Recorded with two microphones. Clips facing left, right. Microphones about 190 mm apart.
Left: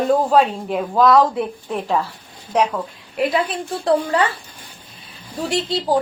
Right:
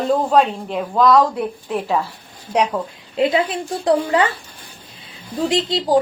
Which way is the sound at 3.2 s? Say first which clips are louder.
Right 3 dB; 25° right (ahead or behind).